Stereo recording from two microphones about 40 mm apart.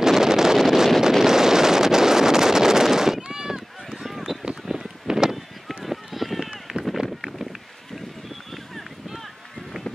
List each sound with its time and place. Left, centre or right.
0.0 s wind noise: centre
1.2 s wind noise: centre
4.5 s run: centre
5.9 s run: centre
7.0 s a sound: centre